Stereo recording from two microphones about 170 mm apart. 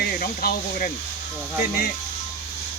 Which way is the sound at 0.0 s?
60° left (ahead or behind).